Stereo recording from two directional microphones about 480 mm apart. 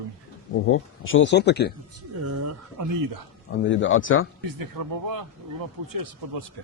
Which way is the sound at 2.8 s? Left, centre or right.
Right.